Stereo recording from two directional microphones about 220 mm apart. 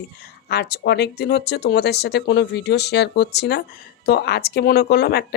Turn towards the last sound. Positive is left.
turn(degrees=45)  # may be behind; listen again after turning